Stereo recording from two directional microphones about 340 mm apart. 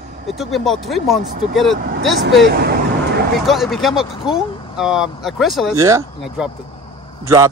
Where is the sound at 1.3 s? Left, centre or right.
Right.